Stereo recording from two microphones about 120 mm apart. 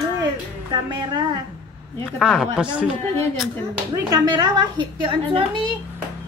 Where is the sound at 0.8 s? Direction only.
35° right (ahead or behind).